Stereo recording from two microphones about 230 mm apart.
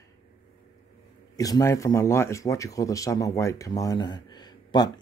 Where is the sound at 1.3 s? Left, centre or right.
Centre.